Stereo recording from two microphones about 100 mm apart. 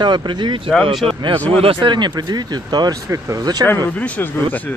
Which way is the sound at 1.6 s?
50° right (ahead or behind).